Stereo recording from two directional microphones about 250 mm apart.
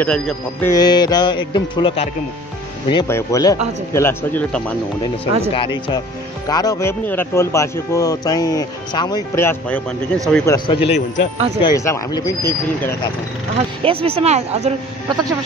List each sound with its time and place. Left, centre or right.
0.0 s speech: centre
5.5 s speech: centre
11.6 s speech: centre
13.8 s speech: right